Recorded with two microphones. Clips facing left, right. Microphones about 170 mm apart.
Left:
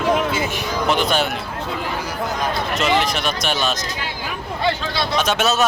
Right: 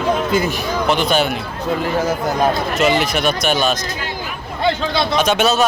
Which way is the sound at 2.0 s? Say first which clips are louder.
Right 7 dB; 45° right (ahead or behind).